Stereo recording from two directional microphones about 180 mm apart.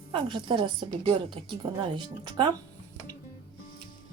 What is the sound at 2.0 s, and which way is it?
Speech, 25° right (ahead or behind).